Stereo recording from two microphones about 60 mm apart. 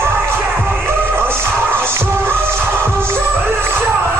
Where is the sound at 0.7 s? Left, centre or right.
Right.